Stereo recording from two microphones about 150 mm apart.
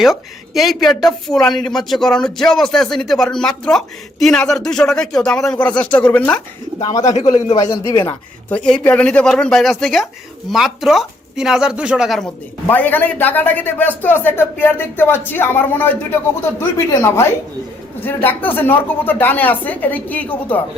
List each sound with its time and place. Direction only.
0.0 s speech: centre (ahead or behind)
6.7 s speech: 25° left (ahead or behind)
7.4 s speech: 45° left (ahead or behind)
7.7 s speech: 20° left (ahead or behind)
8.4 s speech: 5° left (ahead or behind)
12.6 s speech: 10° left (ahead or behind)